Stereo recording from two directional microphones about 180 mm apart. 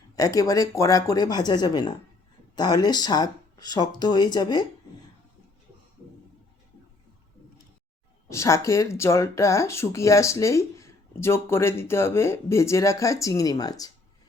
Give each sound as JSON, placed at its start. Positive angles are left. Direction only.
{"t": 0.2, "sound": "speech", "side_deg": 20}
{"t": 8.3, "sound": "speech", "side_deg": 15}